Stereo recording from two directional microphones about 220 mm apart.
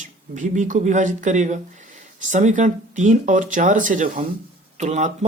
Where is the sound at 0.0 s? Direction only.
35° right (ahead or behind).